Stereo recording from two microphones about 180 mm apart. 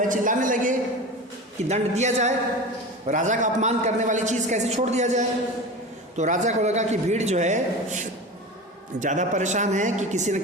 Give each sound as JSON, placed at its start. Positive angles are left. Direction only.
{"t": 0.1, "sound": "a man's voice", "side_deg": -45}